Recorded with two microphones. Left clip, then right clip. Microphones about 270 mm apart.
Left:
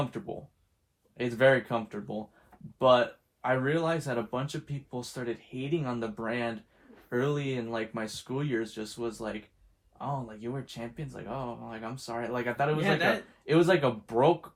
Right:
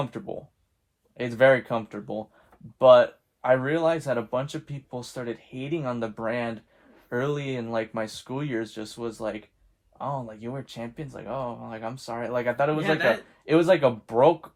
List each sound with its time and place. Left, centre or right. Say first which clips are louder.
0.0 s speech: right 3 dB; right
12.8 s a man's voice: right 2 dB; centre
13.4 s speech: right 5 dB; right